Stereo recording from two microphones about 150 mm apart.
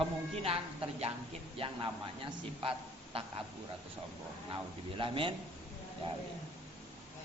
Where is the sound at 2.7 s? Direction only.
35° right (ahead or behind).